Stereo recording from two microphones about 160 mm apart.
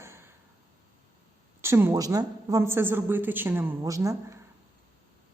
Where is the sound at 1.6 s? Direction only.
15° right (ahead or behind).